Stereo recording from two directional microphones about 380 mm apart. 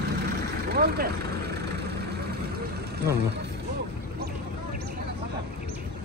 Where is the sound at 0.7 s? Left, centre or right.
Right.